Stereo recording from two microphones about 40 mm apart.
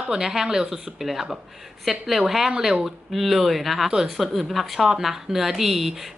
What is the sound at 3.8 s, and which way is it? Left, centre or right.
Speech, centre.